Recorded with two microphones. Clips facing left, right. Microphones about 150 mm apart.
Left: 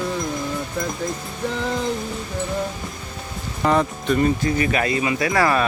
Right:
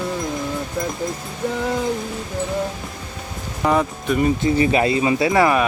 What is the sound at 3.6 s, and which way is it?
Speech, 5° right (ahead or behind).